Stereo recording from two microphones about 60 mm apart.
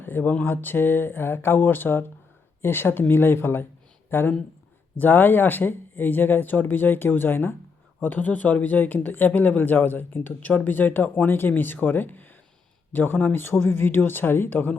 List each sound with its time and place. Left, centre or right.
0.0 s speech: left